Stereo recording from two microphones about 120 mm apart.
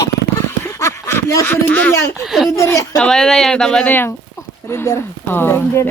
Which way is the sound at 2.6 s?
25° left (ahead or behind).